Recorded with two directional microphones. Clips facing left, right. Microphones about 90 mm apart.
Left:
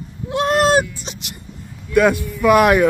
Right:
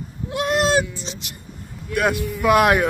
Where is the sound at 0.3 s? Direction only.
30° left (ahead or behind).